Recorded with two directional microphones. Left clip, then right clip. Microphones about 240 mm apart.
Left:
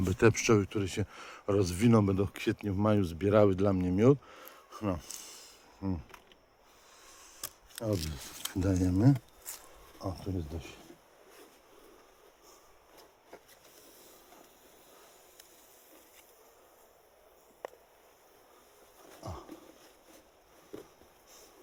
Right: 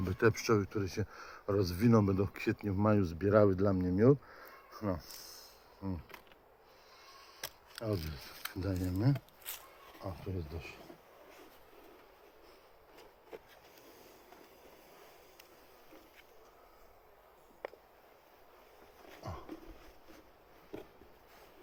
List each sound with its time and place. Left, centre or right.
0.0 s speech: left
7.8 s speech: left